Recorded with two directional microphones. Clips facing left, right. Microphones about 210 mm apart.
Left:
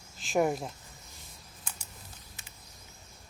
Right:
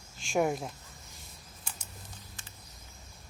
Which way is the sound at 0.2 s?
Centre (ahead or behind).